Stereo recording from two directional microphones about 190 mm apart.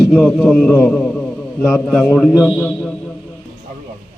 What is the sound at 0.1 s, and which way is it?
A man's voice, 5° left (ahead or behind).